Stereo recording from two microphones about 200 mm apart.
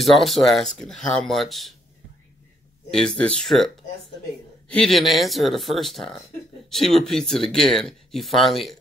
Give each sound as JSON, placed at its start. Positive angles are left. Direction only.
{"t": 0.0, "sound": "speech", "side_deg": 0}
{"t": 3.2, "sound": "speech", "side_deg": 5}